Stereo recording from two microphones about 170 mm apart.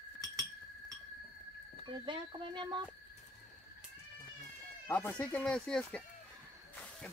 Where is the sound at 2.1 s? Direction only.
25° right (ahead or behind).